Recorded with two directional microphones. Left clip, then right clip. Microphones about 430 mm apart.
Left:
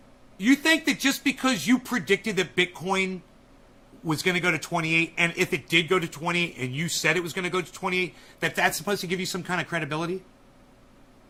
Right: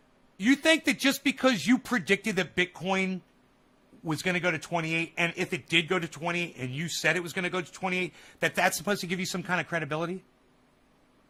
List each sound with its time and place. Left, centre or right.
0.3 s speech: right